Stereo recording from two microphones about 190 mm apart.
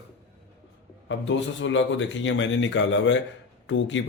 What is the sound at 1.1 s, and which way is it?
Speech, 70° left (ahead or behind).